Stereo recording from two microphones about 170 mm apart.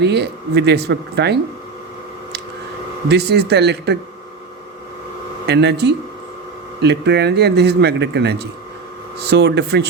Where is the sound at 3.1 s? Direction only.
75° right (ahead or behind).